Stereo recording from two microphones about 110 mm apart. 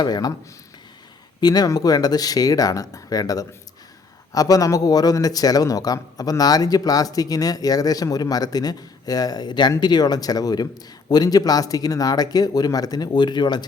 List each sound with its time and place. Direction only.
0.0 s a man's voice: 35° left (ahead or behind)
1.4 s a man's voice: 35° left (ahead or behind)